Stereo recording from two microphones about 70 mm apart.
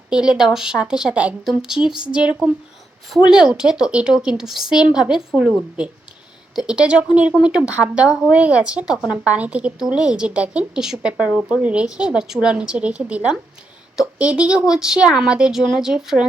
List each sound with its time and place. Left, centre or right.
0.1 s a woman's voice: centre
6.6 s a woman's voice: centre